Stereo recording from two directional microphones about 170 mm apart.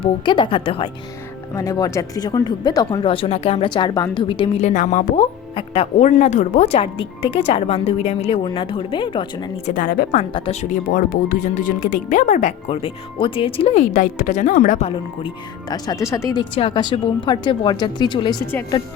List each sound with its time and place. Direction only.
0.0 s speech: 30° left (ahead or behind)
1.5 s speech: 20° left (ahead or behind)
4.5 s speech: 45° left (ahead or behind)
9.6 s speech: 55° left (ahead or behind)
10.3 s speech: 35° left (ahead or behind)
12.7 s speech: 30° left (ahead or behind); by 14.8 s 50° left (ahead or behind)
15.7 s speech: 20° left (ahead or behind)